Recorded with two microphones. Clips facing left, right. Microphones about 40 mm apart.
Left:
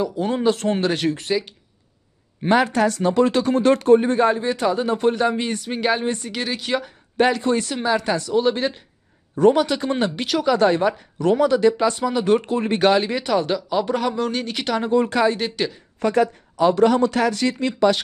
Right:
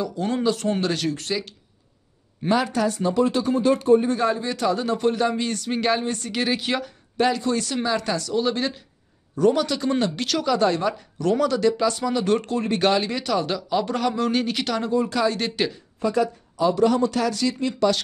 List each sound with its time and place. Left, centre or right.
0.0 s speech: left
0.5 s speech: left
0.8 s speech: left
2.4 s speech: left
4.0 s speech: left
5.7 s speech: centre
6.3 s speech: centre
7.2 s speech: left; by 8.8 s centre
9.4 s speech: left; by 14.6 s centre
14.9 s speech: left
15.6 s speech: centre
16.0 s speech: left
17.7 s speech: left